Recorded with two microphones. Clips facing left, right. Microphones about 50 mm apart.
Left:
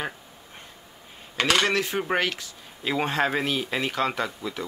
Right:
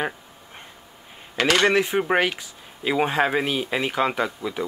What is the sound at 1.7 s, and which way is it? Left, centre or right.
Speech, centre.